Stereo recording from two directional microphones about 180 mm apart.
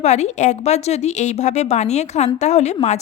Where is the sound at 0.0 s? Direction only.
40° left (ahead or behind).